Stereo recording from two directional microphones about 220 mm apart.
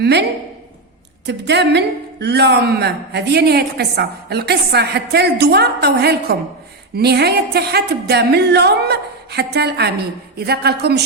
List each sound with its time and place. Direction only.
0.0 s speech: 50° right (ahead or behind)
1.3 s speech: 50° right (ahead or behind)